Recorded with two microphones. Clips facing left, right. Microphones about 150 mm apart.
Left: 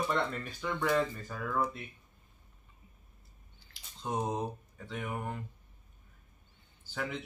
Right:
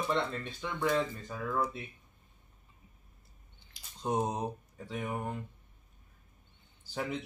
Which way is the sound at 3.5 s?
20° right (ahead or behind).